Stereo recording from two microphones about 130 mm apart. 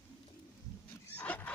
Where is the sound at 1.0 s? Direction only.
15° left (ahead or behind).